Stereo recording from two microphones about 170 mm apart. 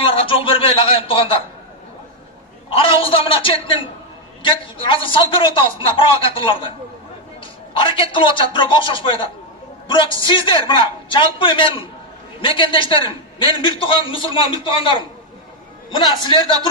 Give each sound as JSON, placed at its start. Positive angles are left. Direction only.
{"t": 0.0, "sound": "speech", "side_deg": 35}
{"t": 2.7, "sound": "a man's voice", "side_deg": 30}
{"t": 7.7, "sound": "a man's voice", "side_deg": 30}